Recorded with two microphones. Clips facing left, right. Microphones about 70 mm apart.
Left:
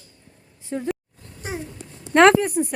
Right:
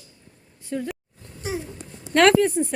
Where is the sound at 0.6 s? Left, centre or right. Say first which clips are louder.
Even; left.